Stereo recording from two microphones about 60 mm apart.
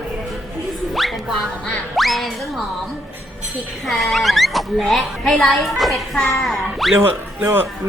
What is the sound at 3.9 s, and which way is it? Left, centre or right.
Speech, centre.